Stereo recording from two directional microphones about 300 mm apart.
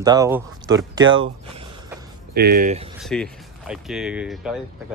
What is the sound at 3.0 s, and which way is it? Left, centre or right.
Speech, centre.